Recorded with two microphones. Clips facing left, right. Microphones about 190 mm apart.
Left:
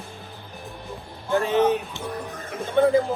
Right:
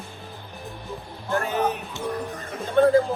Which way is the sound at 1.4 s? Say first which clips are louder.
Left 5 dB; 25° left (ahead or behind).